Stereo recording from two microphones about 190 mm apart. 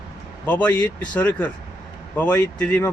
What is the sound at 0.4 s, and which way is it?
Speech, 10° left (ahead or behind).